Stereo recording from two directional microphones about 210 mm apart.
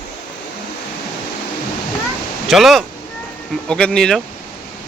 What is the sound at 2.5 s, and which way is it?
Speech, centre (ahead or behind).